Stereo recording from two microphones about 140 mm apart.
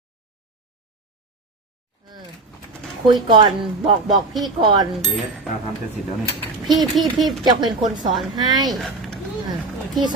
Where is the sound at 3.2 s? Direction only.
35° right (ahead or behind).